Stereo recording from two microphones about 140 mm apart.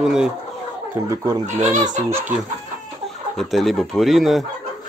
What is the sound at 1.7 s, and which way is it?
Fowl, 60° right (ahead or behind).